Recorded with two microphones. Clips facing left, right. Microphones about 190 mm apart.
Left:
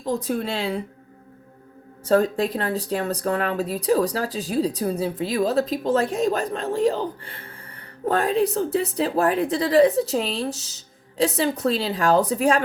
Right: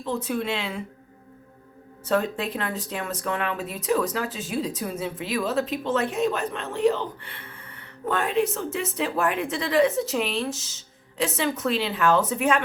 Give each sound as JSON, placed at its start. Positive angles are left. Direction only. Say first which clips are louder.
{"t": 0.0, "sound": "speech", "louder": "left 3 dB", "side_deg": 40}
{"t": 2.0, "sound": "speech", "louder": "left 5 dB", "side_deg": 40}